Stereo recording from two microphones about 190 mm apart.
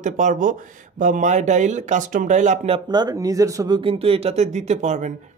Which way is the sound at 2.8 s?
20° right (ahead or behind).